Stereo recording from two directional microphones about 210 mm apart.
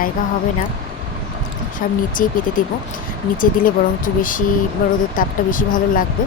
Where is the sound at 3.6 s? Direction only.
40° left (ahead or behind).